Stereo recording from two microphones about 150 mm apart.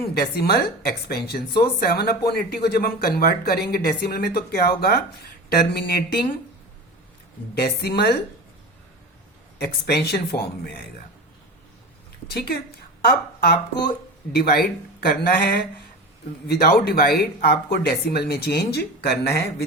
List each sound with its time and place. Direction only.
0.0 s speech: 90° left
1.3 s speech: 80° left
7.6 s speech: 90° left
9.6 s speech: 90° left
12.3 s speech: 90° left
13.1 s speech: 75° left (ahead or behind)
14.3 s speech: 90° left